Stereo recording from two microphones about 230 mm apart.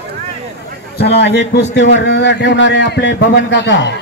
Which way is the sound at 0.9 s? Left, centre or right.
Left.